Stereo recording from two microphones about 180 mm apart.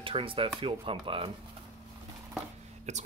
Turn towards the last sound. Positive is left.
turn(degrees=-40)  # may be behind; listen again after turning